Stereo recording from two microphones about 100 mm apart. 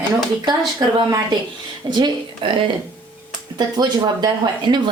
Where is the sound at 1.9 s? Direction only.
55° right (ahead or behind).